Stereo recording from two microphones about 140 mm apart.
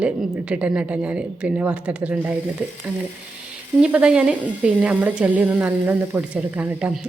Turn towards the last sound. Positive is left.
turn(degrees=-10)  # may be behind; listen again after turning